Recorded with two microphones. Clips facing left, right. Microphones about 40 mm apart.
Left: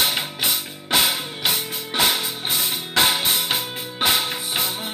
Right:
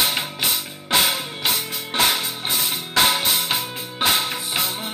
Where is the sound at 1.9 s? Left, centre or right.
Right.